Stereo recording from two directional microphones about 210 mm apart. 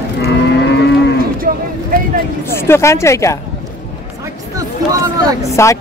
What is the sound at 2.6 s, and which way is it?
Speech, 10° left (ahead or behind).